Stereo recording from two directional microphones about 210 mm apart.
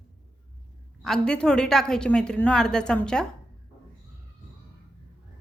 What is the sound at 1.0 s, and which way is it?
A woman's voice, centre (ahead or behind).